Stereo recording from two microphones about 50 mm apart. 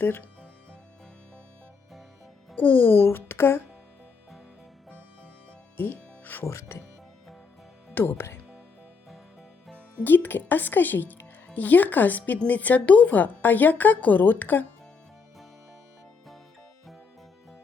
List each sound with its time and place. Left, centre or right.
0.0 s a woman's voice: left
2.6 s a woman's voice: left
5.7 s music: left
6.4 s speech: left
7.9 s speech: left
10.0 s a woman's voice: left